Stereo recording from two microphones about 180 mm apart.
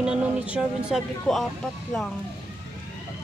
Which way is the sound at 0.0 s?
5° right (ahead or behind).